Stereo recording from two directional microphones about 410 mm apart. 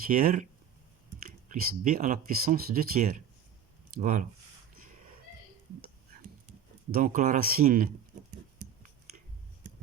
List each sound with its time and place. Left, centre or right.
0.1 s speech: right
6.9 s speech: centre